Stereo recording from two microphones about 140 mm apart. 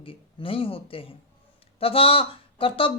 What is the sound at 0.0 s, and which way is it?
Speech, 40° left (ahead or behind).